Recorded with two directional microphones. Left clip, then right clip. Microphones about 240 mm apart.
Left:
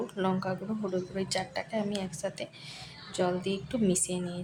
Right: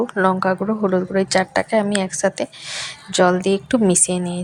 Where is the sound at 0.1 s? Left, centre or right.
Centre.